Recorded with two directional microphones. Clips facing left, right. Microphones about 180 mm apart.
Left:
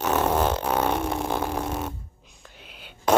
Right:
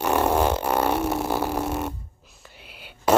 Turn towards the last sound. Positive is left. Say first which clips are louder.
# right 1 dB
turn(degrees=-10)  # may be behind; listen again after turning